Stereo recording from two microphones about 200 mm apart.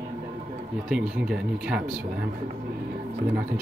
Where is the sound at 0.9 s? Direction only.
5° right (ahead or behind).